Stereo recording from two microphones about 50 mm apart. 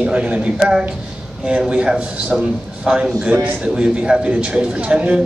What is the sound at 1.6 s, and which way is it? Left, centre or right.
A man's voice, centre.